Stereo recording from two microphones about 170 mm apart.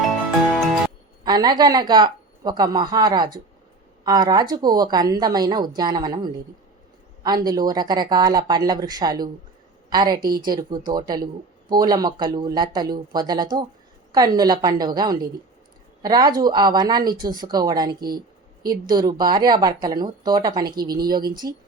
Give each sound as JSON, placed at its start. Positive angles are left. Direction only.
{"t": 0.5, "sound": "music", "side_deg": 0}
{"t": 1.2, "sound": "a woman's voice", "side_deg": -25}